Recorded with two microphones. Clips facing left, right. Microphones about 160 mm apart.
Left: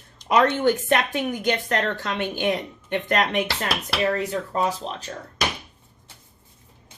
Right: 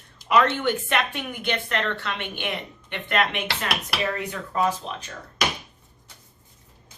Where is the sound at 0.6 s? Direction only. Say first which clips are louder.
Left 4 dB; 40° left (ahead or behind).